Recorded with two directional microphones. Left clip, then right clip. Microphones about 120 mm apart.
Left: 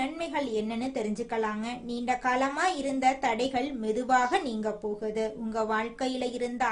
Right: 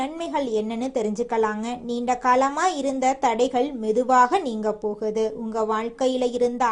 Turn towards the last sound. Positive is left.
turn(degrees=-35)  # may be behind; listen again after turning